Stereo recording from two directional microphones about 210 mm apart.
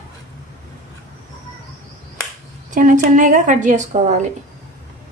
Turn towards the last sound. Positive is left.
turn(degrees=-35)  # may be behind; listen again after turning